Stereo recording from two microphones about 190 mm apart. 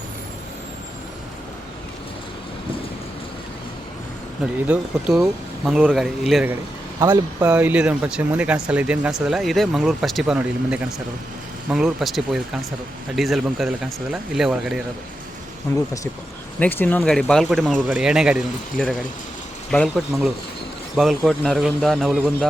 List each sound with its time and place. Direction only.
4.6 s speech: 5° right (ahead or behind)
7.0 s speech: 25° right (ahead or behind)
7.4 s speech: 10° right (ahead or behind)
16.6 s speech: 10° left (ahead or behind)
20.9 s speech: centre (ahead or behind)